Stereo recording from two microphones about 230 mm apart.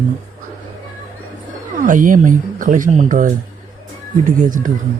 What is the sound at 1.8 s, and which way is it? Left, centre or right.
Speech, right.